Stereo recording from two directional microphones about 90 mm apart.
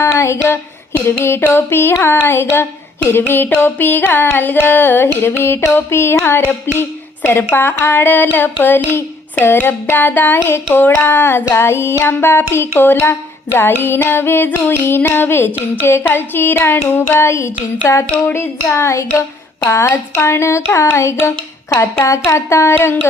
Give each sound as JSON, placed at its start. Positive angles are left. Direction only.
{"t": 0.0, "sound": "child singing", "side_deg": 30}
{"t": 6.7, "sound": "a woman's voice", "side_deg": 25}
{"t": 7.5, "sound": "child singing", "side_deg": 25}
{"t": 17.2, "sound": "a sound", "side_deg": 30}
{"t": 18.3, "sound": "child singing", "side_deg": 30}
{"t": 19.5, "sound": "a sound", "side_deg": 25}
{"t": 22.3, "sound": "child singing", "side_deg": 30}